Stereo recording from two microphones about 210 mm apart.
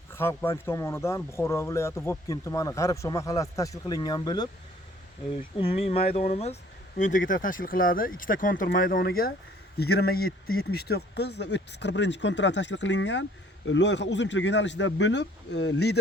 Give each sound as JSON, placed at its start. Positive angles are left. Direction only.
{"t": 0.1, "sound": "speech", "side_deg": 10}